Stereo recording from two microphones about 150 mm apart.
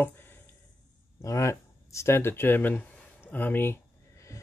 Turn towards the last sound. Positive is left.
turn(degrees=15)  # may be behind; listen again after turning